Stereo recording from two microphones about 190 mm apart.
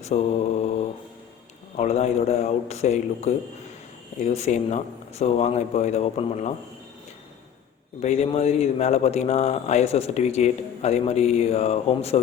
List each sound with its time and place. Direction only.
0.1 s a man's voice: 40° left (ahead or behind)
1.7 s a man's voice: 35° left (ahead or behind)
8.0 s a man's voice: 35° left (ahead or behind)